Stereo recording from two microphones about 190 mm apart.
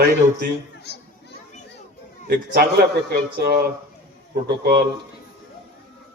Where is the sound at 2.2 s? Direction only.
55° right (ahead or behind).